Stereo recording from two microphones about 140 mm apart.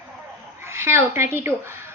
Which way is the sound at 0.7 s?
20° right (ahead or behind).